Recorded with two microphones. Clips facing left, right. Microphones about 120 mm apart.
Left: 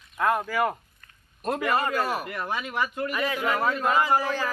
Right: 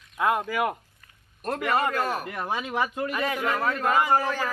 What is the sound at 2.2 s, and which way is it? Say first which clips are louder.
Speech: right 1 dB; 30° right (ahead or behind).